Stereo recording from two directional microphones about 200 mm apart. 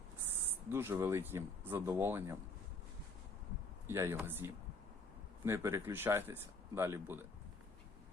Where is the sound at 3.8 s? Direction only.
10° right (ahead or behind).